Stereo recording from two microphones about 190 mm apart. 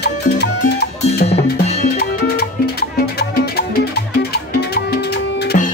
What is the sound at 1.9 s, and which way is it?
Music, 55° left (ahead or behind).